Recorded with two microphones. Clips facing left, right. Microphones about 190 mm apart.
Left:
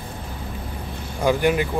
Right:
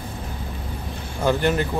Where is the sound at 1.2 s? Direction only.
10° left (ahead or behind).